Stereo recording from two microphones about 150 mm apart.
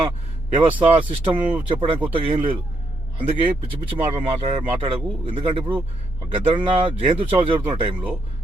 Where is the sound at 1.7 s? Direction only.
35° right (ahead or behind).